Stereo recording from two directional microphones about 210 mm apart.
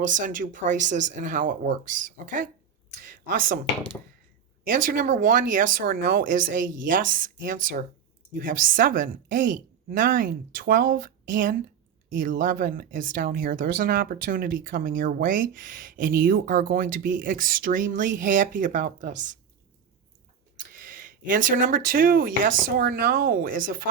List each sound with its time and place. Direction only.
0.0 s speech: 40° right (ahead or behind)
4.6 s speech: 40° right (ahead or behind)
20.7 s speech: 40° right (ahead or behind)